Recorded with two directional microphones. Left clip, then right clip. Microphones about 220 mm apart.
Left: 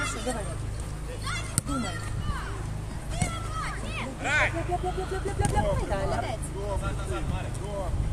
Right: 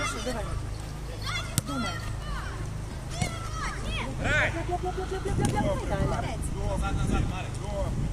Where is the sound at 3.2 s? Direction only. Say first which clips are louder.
Left 1 dB; 45° left (ahead or behind).